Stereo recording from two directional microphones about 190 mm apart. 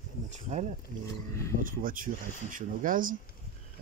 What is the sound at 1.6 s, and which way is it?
Speech, 45° right (ahead or behind).